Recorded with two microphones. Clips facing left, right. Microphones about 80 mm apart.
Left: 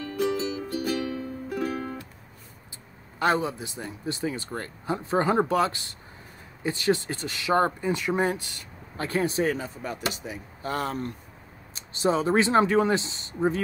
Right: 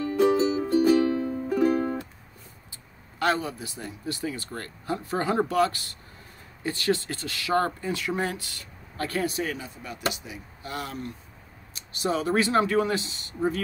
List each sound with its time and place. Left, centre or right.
0.0 s music: right
1.8 s music: right
3.2 s speech: left
11.7 s speech: left